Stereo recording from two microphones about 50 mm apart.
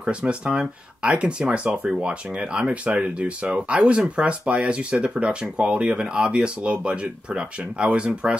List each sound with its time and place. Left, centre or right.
0.0 s speech: right